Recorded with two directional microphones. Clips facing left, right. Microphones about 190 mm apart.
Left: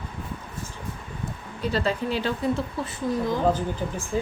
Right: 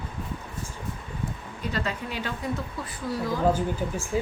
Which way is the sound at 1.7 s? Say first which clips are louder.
Left 6 dB; 30° left (ahead or behind).